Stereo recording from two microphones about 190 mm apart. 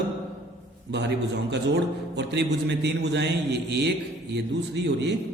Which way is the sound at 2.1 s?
60° right (ahead or behind).